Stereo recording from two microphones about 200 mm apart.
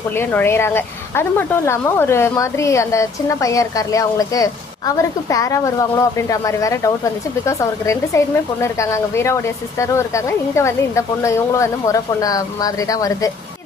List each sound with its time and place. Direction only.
0.1 s speech: 10° left (ahead or behind)